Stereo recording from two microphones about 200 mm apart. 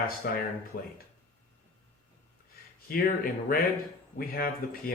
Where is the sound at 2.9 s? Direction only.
45° left (ahead or behind).